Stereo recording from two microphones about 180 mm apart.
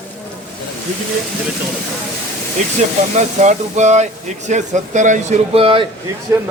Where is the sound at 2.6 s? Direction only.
40° right (ahead or behind).